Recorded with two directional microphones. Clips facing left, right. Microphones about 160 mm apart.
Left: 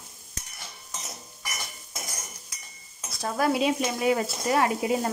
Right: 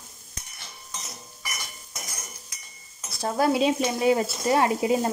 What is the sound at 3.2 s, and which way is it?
Speech, 30° right (ahead or behind).